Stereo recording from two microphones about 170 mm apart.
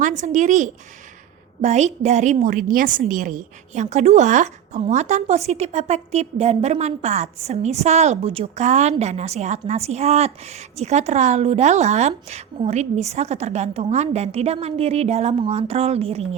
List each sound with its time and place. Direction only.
0.0 s a woman's voice: 45° right (ahead or behind)